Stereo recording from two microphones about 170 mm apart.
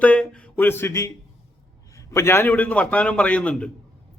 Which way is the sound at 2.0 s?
15° left (ahead or behind).